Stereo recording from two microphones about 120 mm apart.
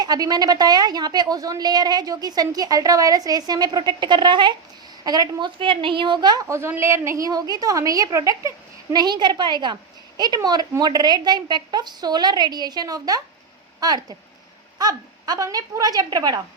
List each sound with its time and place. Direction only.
0.0 s a woman's voice: 35° right (ahead or behind)
5.5 s a woman's voice: 45° right (ahead or behind)